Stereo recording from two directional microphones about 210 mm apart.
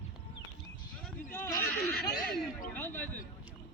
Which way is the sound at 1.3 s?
10° left (ahead or behind).